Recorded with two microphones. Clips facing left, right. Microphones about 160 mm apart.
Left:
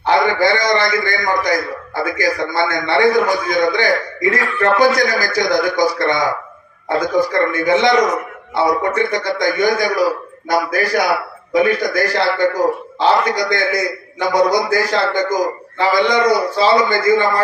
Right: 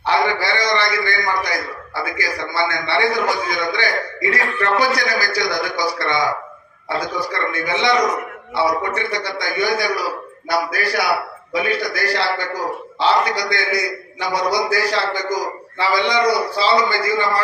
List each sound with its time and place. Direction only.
0.0 s a man's voice: 45° left (ahead or behind)